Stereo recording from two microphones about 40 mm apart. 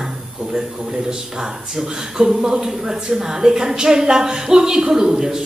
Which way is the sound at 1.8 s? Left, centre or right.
Centre.